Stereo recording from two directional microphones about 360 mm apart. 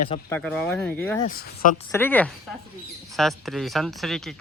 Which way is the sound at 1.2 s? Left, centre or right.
Left.